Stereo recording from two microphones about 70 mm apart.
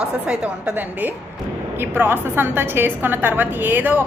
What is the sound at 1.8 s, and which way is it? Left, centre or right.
A woman's voice, right.